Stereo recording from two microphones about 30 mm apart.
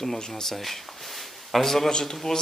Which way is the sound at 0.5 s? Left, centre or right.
Centre.